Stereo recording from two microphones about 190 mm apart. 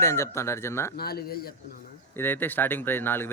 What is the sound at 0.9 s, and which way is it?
Speech, 55° left (ahead or behind).